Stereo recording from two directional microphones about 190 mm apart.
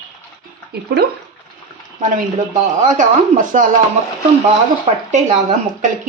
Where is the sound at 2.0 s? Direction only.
40° right (ahead or behind).